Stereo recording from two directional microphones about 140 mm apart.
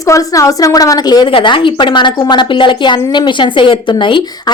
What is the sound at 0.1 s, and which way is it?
A woman's voice, 25° left (ahead or behind).